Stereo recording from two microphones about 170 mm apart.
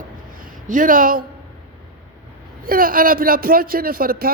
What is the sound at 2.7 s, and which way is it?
Speech, 55° right (ahead or behind).